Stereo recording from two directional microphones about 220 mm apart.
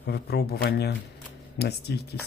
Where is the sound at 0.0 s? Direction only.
50° left (ahead or behind).